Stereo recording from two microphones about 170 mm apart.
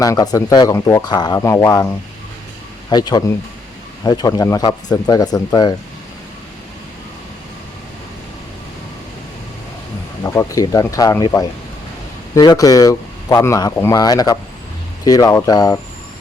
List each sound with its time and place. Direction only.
0.0 s speech: 20° left (ahead or behind)
2.9 s speech: 25° left (ahead or behind)
10.2 s speech: 15° left (ahead or behind)